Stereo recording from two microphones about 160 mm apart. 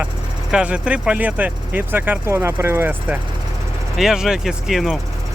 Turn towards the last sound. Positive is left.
turn(degrees=0)  # may be behind; listen again after turning